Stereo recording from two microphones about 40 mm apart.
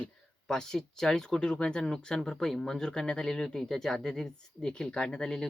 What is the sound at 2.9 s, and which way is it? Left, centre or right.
Speech, left.